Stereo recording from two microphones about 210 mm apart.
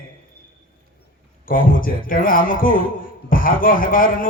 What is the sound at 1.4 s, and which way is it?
Music, 40° left (ahead or behind).